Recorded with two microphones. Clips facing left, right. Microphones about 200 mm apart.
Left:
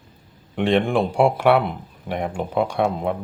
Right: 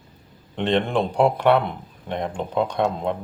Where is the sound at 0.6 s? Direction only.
10° left (ahead or behind).